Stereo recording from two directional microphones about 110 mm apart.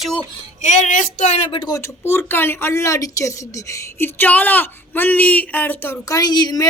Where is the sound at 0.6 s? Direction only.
90° left.